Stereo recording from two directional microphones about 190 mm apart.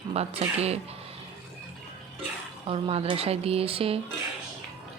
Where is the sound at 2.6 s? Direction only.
30° right (ahead or behind).